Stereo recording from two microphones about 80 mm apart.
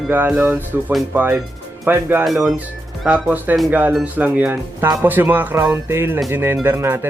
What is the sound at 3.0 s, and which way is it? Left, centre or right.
Speech, centre.